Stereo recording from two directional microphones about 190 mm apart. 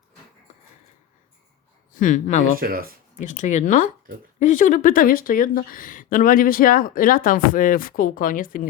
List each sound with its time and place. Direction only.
1.9 s speech: 40° left (ahead or behind)
2.6 s speech: 50° right (ahead or behind)
3.2 s speech: 40° left (ahead or behind)